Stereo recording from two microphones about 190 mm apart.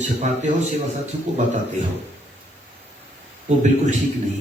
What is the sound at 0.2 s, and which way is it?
Speech, 35° right (ahead or behind).